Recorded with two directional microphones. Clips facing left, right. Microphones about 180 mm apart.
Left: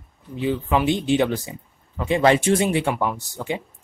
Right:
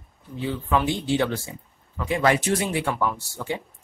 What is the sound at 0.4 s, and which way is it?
Speech, 15° left (ahead or behind).